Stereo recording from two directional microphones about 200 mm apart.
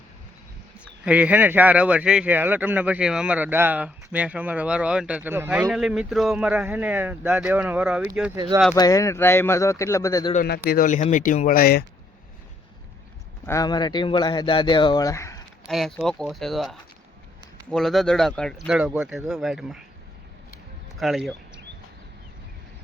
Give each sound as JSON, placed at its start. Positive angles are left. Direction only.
{"t": 1.0, "sound": "speech", "side_deg": -5}
{"t": 8.7, "sound": "speech", "side_deg": 15}
{"t": 10.3, "sound": "speech", "side_deg": 50}
{"t": 13.4, "sound": "speech", "side_deg": 15}
{"t": 15.6, "sound": "speech", "side_deg": 0}
{"t": 21.0, "sound": "speech", "side_deg": 0}